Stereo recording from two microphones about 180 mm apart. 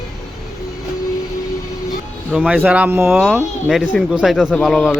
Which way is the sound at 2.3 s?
5° right (ahead or behind).